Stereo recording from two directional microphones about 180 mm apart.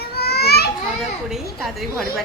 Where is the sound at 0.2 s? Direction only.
60° left (ahead or behind).